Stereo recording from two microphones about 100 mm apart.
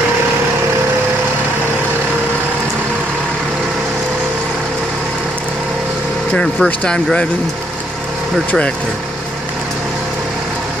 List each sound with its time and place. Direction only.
6.3 s speech: 10° left (ahead or behind)
8.5 s speech: 10° left (ahead or behind)